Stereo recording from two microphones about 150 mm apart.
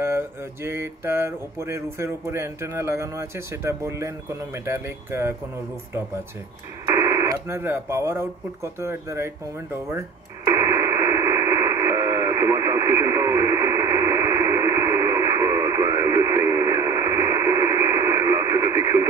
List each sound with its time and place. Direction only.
0.0 s mantra: 15° right (ahead or behind)
6.9 s speech: 20° right (ahead or behind)
8.7 s mantra: 15° right (ahead or behind)
9.8 s radio: 20° right (ahead or behind)